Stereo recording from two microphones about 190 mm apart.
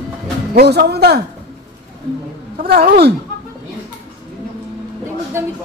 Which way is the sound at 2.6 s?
55° right (ahead or behind).